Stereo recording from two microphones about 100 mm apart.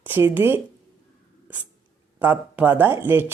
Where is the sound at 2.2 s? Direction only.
20° right (ahead or behind).